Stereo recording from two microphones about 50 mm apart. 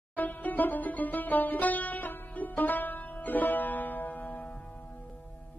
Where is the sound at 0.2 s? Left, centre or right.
Left.